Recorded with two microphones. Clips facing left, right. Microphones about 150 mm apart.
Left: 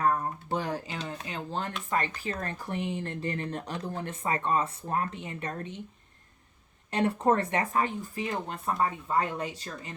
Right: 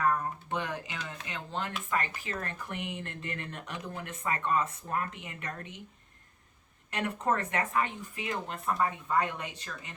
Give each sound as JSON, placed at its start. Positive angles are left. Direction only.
{"t": 0.0, "sound": "a sound", "side_deg": 35}
{"t": 1.9, "sound": "speech", "side_deg": 35}
{"t": 6.9, "sound": "speech", "side_deg": 30}